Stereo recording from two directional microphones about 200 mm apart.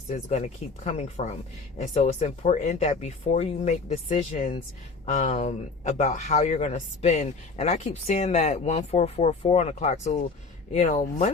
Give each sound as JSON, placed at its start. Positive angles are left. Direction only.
{"t": 0.3, "sound": "speech", "side_deg": 35}